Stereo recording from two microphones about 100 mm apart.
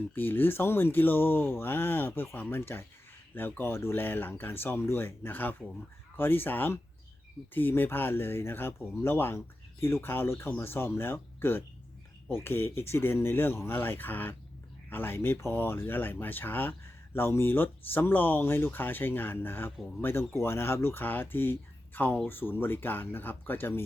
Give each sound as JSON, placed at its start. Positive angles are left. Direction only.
{"t": 0.1, "sound": "speech", "side_deg": 20}